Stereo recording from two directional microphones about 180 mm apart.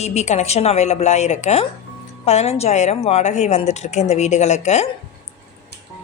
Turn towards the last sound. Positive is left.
turn(degrees=40)  # may be behind; listen again after turning